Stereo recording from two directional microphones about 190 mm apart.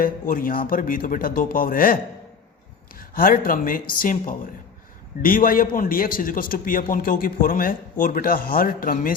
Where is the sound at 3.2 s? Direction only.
45° left (ahead or behind).